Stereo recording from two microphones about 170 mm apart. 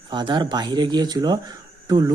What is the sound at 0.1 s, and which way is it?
Speech, 25° right (ahead or behind).